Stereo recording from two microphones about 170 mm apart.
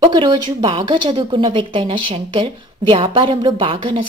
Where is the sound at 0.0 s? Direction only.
30° right (ahead or behind).